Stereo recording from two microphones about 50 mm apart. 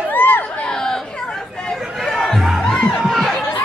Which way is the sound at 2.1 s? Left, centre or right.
Centre.